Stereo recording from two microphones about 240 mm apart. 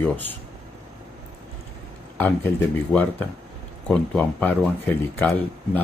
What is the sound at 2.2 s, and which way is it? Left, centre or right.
Speech, centre.